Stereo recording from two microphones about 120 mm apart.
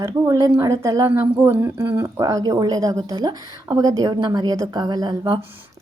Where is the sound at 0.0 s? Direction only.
25° right (ahead or behind).